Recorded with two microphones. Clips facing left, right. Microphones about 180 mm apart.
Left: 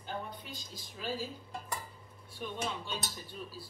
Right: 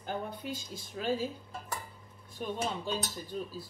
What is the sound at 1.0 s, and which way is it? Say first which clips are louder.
Speech: right 6 dB; 50° right (ahead or behind).